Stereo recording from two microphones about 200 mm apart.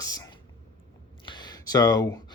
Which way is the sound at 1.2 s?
20° left (ahead or behind).